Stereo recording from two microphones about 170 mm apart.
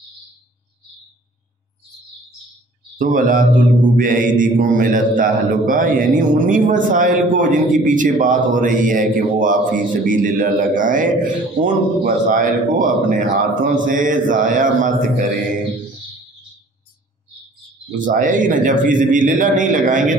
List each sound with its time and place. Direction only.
3.0 s a man's voice: 50° right (ahead or behind)
18.0 s a man's voice: 50° right (ahead or behind)